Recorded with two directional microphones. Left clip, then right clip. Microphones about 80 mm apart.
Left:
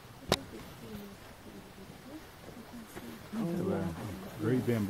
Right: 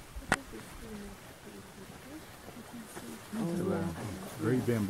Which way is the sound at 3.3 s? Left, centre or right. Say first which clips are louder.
Even; left.